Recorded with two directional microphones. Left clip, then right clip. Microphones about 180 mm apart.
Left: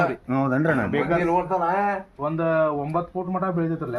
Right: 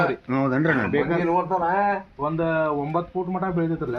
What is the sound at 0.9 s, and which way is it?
Speech, 15° left (ahead or behind).